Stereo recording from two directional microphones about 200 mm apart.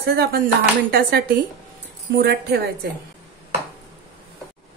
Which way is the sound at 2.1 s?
55° right (ahead or behind).